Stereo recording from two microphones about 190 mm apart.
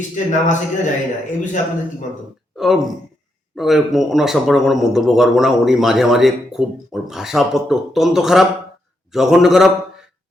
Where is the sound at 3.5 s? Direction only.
Centre (ahead or behind).